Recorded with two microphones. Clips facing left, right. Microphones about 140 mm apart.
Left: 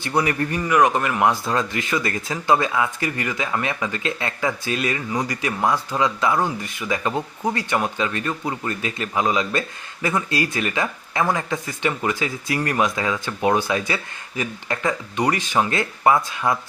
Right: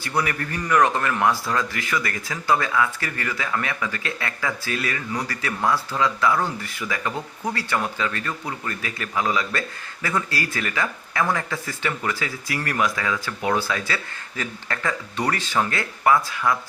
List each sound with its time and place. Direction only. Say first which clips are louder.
0.0 s speech: left 4 dB; 20° left (ahead or behind)
0.6 s speech: left 1 dB; 10° left (ahead or behind)